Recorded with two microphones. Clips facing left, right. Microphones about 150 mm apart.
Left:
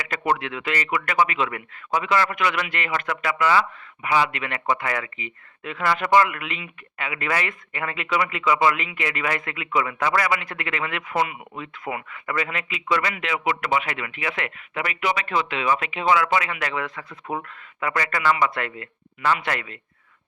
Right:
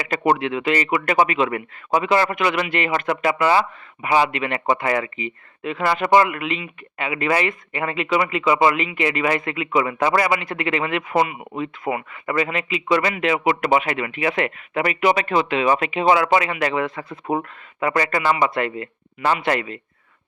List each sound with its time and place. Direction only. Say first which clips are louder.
0.0 s speech: right 5 dB; 25° right (ahead or behind)
13.2 s speech: right 6 dB; 35° right (ahead or behind)